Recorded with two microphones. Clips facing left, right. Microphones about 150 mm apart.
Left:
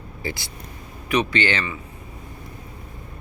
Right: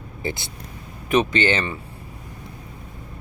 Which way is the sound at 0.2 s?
20° right (ahead or behind).